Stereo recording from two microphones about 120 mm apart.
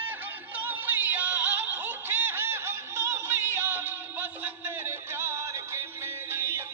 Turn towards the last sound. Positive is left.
turn(degrees=-20)  # may be behind; listen again after turning